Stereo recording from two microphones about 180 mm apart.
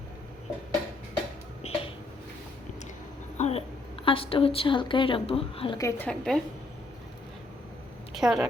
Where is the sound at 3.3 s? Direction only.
40° left (ahead or behind).